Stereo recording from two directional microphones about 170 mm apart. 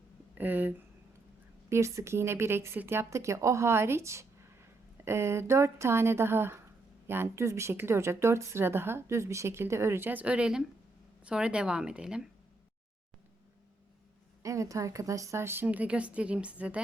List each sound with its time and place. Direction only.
0.3 s speech: 10° right (ahead or behind)
1.7 s a woman's voice: 15° right (ahead or behind)
14.4 s a woman's voice: 20° right (ahead or behind)